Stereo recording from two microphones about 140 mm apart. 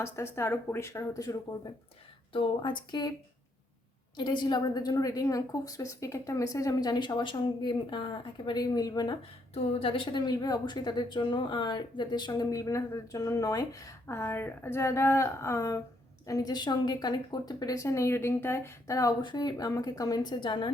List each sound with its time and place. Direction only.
0.3 s a woman's voice: 15° left (ahead or behind)
2.3 s a woman's voice: 35° left (ahead or behind)
4.2 s a woman's voice: 35° left (ahead or behind)
9.7 s a woman's voice: 40° left (ahead or behind)